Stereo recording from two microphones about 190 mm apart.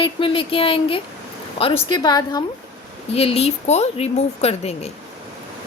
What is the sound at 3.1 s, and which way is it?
A woman's voice, 30° left (ahead or behind).